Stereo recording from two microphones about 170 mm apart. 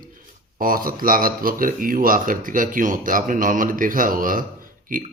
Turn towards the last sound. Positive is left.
turn(degrees=-55)  # may be behind; listen again after turning